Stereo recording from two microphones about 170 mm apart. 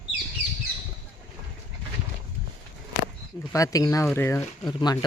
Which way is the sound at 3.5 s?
20° left (ahead or behind).